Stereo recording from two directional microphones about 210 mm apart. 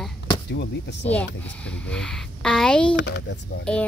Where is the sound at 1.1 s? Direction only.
5° left (ahead or behind).